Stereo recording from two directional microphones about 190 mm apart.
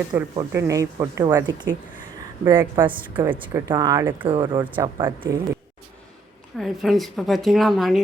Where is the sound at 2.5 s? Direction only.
15° right (ahead or behind).